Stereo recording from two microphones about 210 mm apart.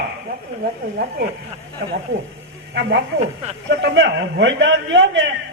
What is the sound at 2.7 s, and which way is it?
A woman's voice, 55° right (ahead or behind).